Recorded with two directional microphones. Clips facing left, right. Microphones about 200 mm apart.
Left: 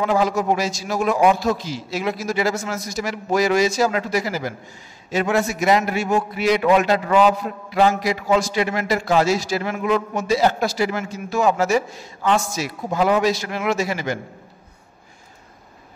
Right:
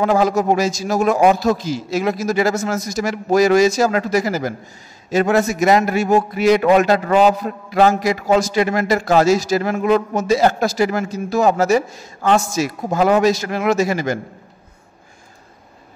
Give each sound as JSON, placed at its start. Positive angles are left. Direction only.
{"t": 0.0, "sound": "a man's voice", "side_deg": -45}